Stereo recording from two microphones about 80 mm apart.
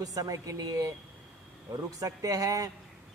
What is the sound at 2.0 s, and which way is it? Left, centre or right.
Speech, right.